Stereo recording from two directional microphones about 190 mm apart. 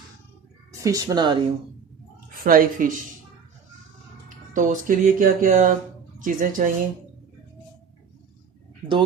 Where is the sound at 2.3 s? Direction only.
50° right (ahead or behind).